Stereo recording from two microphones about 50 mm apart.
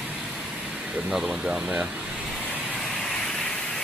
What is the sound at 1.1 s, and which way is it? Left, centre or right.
Speech, centre.